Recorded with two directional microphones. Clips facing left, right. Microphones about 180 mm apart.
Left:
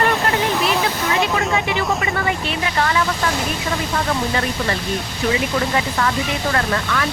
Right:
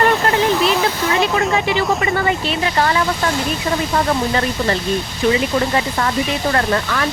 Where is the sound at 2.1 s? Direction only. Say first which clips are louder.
Right 3 dB; 35° right (ahead or behind).